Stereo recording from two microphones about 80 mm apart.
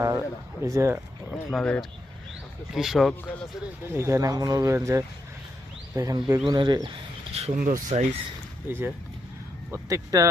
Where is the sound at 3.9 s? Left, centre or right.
Right.